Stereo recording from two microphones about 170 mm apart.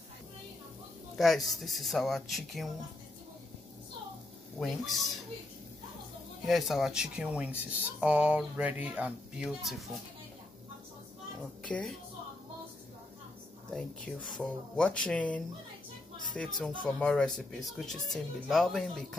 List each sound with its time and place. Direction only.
1.1 s speech: centre (ahead or behind)
4.6 s speech: centre (ahead or behind)
6.4 s speech: centre (ahead or behind)
11.6 s a woman's voice: 5° left (ahead or behind)
13.7 s speech: 5° left (ahead or behind)